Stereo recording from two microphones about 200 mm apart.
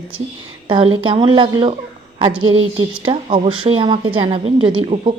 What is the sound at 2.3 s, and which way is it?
Speech, 90° right.